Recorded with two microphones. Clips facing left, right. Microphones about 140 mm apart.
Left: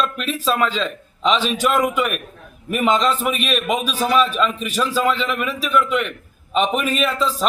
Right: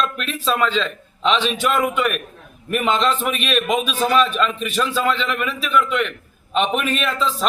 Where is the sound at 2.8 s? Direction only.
40° left (ahead or behind).